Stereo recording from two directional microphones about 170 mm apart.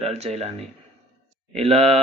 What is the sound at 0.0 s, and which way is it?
Speech, 40° right (ahead or behind).